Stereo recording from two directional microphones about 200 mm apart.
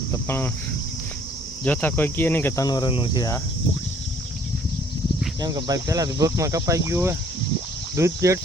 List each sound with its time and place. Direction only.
0.1 s speech: 10° left (ahead or behind)
1.6 s speech: 10° left (ahead or behind)
5.4 s speech: 20° right (ahead or behind)